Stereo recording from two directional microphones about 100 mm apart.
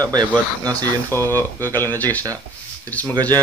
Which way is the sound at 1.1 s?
20° left (ahead or behind).